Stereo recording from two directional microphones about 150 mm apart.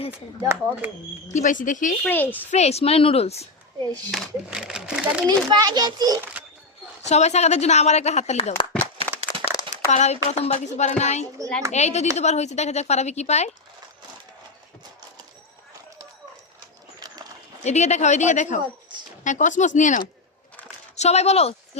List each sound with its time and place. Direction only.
0.1 s speech: 10° right (ahead or behind)
1.3 s speech: 55° left (ahead or behind)
2.0 s a woman's voice: 10° left (ahead or behind)
2.5 s a woman's voice: 45° left (ahead or behind)
4.1 s speech: centre (ahead or behind)
5.3 s a child's voice: 25° right (ahead or behind)
7.0 s a woman's voice: 50° left (ahead or behind)
9.3 s crumpling: 25° left (ahead or behind)
9.9 s a woman's voice: 50° left (ahead or behind)
17.6 s a woman's voice: 50° left (ahead or behind)